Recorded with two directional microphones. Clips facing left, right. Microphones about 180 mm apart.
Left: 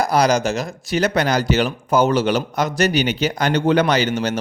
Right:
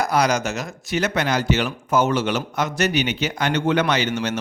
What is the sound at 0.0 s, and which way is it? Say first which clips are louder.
A man's voice: left 3 dB; 35° left (ahead or behind).